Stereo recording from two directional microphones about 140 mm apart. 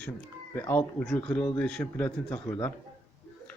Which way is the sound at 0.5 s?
15° left (ahead or behind).